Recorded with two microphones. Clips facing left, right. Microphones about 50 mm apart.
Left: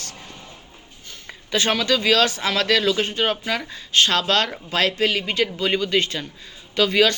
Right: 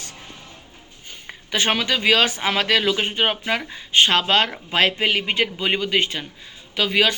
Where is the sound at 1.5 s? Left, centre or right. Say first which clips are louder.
Left 1 dB; centre.